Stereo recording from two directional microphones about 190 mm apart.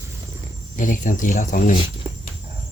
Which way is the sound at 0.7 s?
45° left (ahead or behind).